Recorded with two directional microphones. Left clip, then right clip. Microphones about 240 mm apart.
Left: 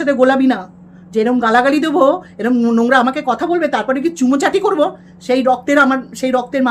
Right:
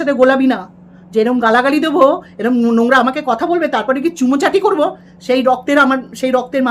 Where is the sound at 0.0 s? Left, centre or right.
Centre.